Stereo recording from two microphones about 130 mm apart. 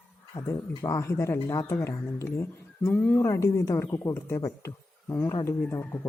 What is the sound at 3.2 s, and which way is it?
Speech, 20° left (ahead or behind).